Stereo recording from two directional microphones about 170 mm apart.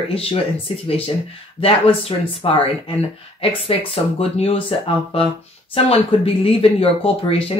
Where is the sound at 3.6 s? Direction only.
35° left (ahead or behind).